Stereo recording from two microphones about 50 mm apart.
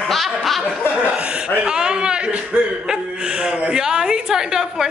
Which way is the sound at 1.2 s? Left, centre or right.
Centre.